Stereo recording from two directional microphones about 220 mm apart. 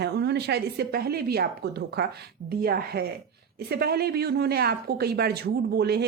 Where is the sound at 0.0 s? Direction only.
50° right (ahead or behind).